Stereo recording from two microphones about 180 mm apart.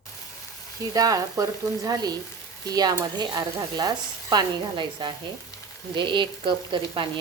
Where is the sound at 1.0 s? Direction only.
20° right (ahead or behind).